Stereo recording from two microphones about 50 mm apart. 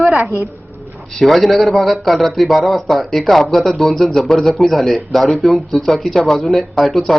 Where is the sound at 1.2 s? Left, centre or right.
Centre.